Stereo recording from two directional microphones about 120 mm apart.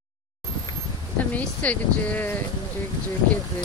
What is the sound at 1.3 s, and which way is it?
Speech, 10° left (ahead or behind).